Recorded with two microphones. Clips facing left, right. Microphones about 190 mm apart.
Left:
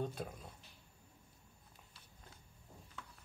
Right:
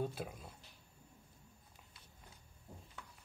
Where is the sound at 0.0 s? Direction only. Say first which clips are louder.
Right 1 dB; 5° right (ahead or behind).